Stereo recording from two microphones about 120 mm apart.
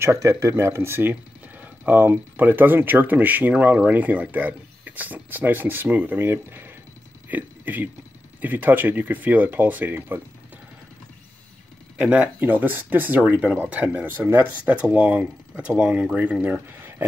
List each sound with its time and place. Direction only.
0.0 s speech: 25° right (ahead or behind)
12.0 s speech: 10° right (ahead or behind)